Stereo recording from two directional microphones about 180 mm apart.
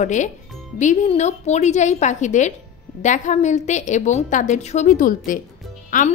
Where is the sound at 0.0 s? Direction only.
40° left (ahead or behind).